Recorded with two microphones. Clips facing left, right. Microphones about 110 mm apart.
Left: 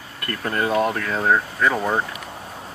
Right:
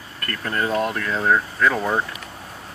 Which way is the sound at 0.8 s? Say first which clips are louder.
Left 1 dB; 35° left (ahead or behind).